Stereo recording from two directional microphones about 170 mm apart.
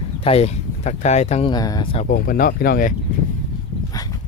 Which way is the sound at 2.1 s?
55° left (ahead or behind).